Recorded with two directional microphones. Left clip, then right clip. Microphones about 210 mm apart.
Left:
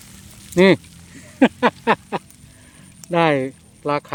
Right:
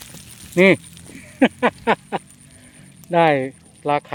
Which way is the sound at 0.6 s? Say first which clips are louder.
Even; 10° left (ahead or behind).